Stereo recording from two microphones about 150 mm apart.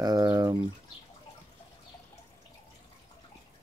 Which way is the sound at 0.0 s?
25° right (ahead or behind).